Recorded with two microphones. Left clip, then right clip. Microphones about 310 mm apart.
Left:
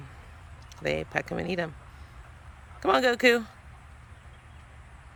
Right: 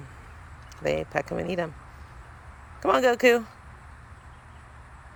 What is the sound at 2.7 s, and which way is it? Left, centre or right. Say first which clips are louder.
Speech: right 2 dB; centre.